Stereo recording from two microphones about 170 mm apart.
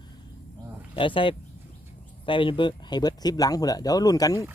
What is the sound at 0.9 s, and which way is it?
Speech, 30° left (ahead or behind).